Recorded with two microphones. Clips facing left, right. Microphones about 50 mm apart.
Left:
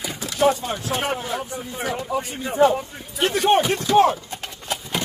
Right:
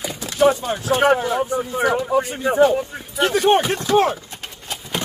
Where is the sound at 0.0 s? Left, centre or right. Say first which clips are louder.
Right 3 dB; centre.